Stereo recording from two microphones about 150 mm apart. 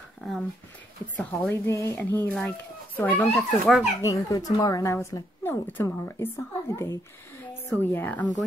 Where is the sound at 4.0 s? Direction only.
20° left (ahead or behind).